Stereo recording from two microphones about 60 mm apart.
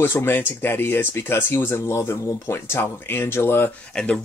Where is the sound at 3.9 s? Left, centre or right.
Centre.